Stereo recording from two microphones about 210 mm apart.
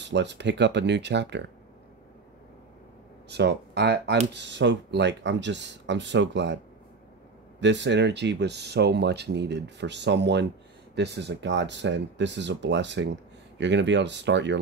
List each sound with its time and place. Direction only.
0.0 s speech: 55° right (ahead or behind)
3.3 s speech: 55° right (ahead or behind)
7.6 s speech: 55° right (ahead or behind)